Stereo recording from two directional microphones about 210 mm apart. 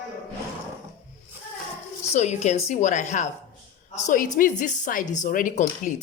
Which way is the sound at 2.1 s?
30° left (ahead or behind).